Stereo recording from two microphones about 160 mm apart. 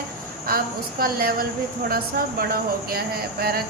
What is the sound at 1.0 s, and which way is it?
A woman's voice, 65° right (ahead or behind).